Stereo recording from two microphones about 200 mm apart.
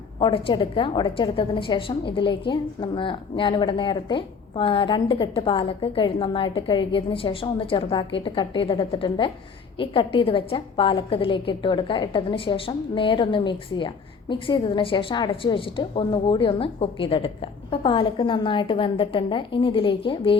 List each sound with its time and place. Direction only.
0.2 s a woman's voice: 25° left (ahead or behind)